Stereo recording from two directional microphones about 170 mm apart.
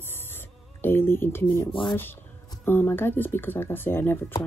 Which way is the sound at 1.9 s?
10° left (ahead or behind).